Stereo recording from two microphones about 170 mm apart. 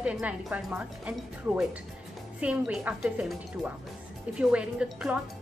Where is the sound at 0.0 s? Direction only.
5° right (ahead or behind).